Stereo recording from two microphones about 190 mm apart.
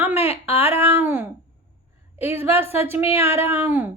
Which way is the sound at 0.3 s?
10° right (ahead or behind).